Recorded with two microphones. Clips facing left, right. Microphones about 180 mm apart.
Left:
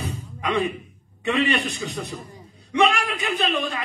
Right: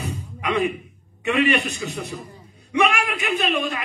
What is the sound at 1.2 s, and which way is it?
A man's voice, 10° right (ahead or behind).